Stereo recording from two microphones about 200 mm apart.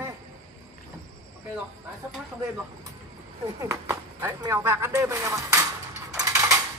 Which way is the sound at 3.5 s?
15° right (ahead or behind).